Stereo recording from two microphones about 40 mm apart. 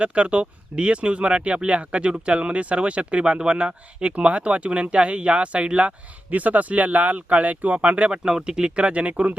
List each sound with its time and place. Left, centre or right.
0.0 s speech: right
6.3 s speech: right
8.1 s speech: right